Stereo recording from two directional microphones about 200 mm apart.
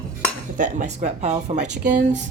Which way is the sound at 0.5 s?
40° right (ahead or behind).